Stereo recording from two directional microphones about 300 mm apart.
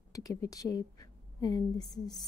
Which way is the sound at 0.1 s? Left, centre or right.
Centre.